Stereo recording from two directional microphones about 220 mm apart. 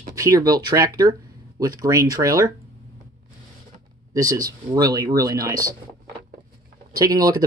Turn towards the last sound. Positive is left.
turn(degrees=-15)  # may be behind; listen again after turning